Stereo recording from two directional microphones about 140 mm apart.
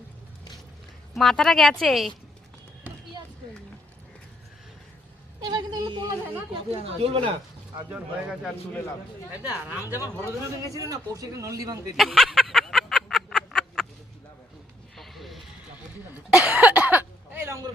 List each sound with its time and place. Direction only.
1.1 s a woman's voice: 5° left (ahead or behind)
5.4 s a sound: 30° right (ahead or behind)
6.5 s speech: 45° right (ahead or behind)
7.9 s speech: 10° right (ahead or behind)
10.0 s a man's voice: 20° left (ahead or behind)
10.8 s speech: 25° right (ahead or behind)
11.9 s a sound: centre (ahead or behind)
14.9 s music: centre (ahead or behind)
16.1 s a sound: 5° right (ahead or behind)